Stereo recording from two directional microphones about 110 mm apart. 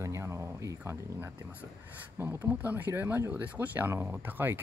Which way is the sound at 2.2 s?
20° right (ahead or behind).